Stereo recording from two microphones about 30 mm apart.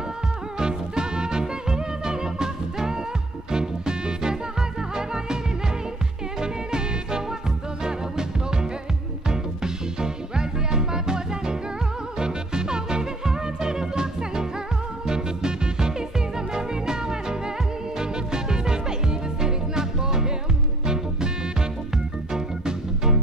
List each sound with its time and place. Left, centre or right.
0.6 s music: right
6.4 s music: right